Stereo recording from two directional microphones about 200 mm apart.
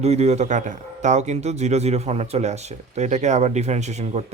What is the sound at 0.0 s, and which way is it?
A man's voice, 30° right (ahead or behind).